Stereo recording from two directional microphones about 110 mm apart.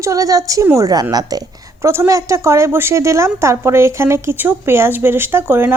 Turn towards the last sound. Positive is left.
turn(degrees=-20)  # may be behind; listen again after turning